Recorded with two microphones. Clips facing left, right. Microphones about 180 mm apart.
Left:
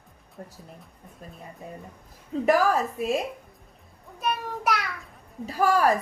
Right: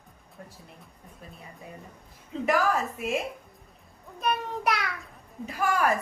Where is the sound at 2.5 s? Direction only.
35° left (ahead or behind).